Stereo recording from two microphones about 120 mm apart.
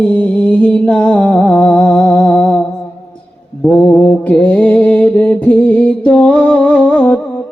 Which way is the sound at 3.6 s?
10° left (ahead or behind).